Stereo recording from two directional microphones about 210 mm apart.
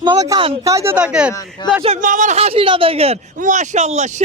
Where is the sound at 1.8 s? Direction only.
40° right (ahead or behind).